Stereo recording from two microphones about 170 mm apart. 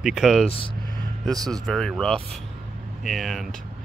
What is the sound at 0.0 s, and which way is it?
Speech, centre (ahead or behind).